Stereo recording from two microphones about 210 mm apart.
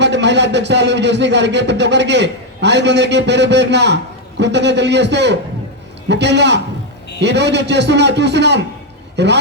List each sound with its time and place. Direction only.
0.0 s a man's voice: 55° right (ahead or behind)